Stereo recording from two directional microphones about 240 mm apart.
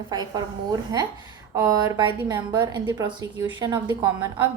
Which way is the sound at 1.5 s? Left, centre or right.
Centre.